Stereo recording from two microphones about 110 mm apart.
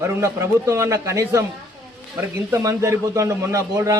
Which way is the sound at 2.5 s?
25° right (ahead or behind).